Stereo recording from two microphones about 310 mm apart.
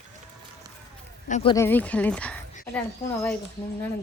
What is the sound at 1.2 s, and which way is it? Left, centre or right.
Speech, centre.